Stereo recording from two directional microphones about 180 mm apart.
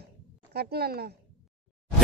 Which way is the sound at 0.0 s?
60° right (ahead or behind).